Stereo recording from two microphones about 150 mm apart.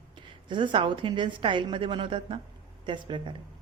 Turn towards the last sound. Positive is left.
turn(degrees=-35)  # may be behind; listen again after turning